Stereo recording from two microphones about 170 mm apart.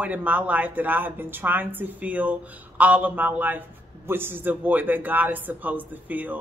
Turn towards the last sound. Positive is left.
turn(degrees=-10)  # may be behind; listen again after turning